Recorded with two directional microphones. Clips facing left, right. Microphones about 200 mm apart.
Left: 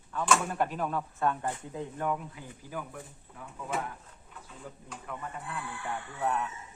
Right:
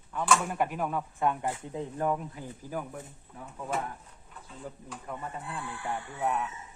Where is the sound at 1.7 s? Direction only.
35° right (ahead or behind).